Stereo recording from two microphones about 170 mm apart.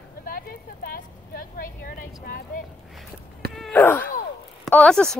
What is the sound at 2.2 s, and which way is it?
Speech, 55° left (ahead or behind).